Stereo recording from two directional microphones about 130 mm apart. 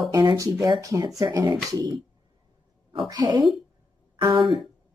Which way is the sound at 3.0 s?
30° right (ahead or behind).